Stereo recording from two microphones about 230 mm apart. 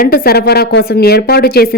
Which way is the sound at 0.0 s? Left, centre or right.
Left.